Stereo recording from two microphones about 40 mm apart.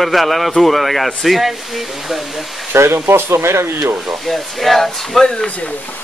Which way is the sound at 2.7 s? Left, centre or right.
Right.